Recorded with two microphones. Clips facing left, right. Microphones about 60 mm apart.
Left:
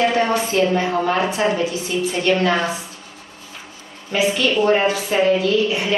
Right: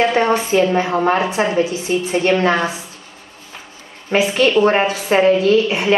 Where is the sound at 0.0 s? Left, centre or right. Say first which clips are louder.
Right 2 dB; right.